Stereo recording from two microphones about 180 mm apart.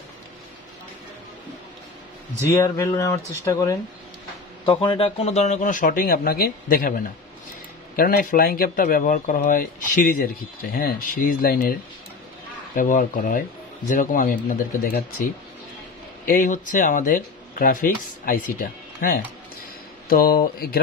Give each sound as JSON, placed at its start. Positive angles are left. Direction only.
{"t": 2.5, "sound": "speech", "side_deg": 15}
{"t": 7.9, "sound": "speech", "side_deg": 50}